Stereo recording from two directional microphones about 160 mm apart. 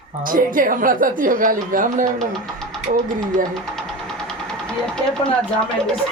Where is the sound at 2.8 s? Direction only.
50° right (ahead or behind).